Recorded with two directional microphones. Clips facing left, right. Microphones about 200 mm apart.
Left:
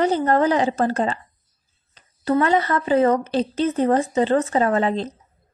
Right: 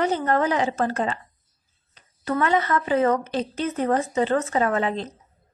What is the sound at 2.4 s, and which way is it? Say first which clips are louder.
A woman's voice: left 1 dB; 35° left (ahead or behind).